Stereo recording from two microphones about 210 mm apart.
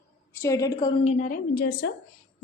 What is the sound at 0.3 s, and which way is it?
A woman's voice, 15° left (ahead or behind).